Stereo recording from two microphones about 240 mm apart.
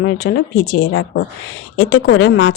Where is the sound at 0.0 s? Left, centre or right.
Left.